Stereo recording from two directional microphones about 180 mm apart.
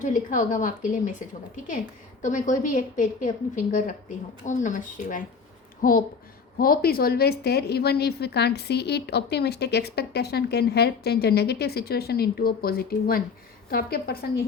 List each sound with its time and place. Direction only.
0.0 s a woman's voice: 45° left (ahead or behind)
2.2 s a woman's voice: 45° left (ahead or behind)